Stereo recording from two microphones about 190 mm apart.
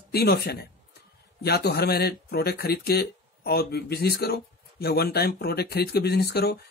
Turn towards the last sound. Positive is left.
turn(degrees=55)  # may be behind; listen again after turning